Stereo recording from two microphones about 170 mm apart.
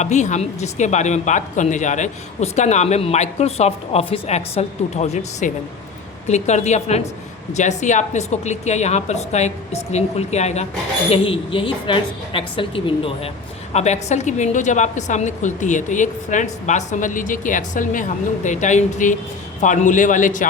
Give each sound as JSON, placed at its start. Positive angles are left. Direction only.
{"t": 0.0, "sound": "a woman's voice", "side_deg": 45}